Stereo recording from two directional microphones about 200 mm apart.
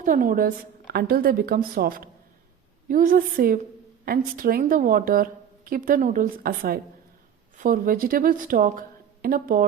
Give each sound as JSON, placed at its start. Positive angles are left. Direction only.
{"t": 0.0, "sound": "a woman's voice", "side_deg": -40}